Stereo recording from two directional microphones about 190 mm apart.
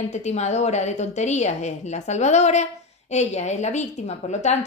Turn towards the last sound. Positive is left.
turn(degrees=35)  # may be behind; listen again after turning